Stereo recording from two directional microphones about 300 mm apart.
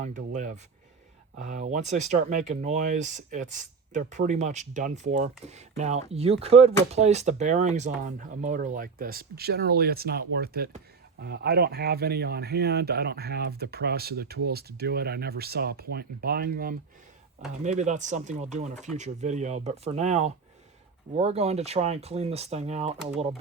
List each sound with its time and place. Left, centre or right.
0.0 s speech: right